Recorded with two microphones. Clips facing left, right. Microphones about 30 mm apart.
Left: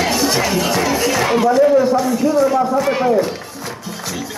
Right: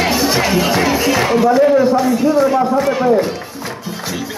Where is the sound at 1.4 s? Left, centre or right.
Centre.